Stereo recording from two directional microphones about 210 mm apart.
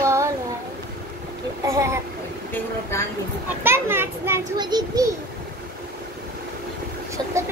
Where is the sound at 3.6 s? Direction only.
10° right (ahead or behind).